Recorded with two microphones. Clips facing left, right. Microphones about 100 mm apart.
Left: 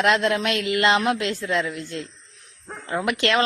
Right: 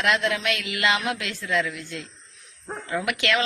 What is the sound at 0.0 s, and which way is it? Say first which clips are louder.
Speech: left 4 dB; 35° left (ahead or behind).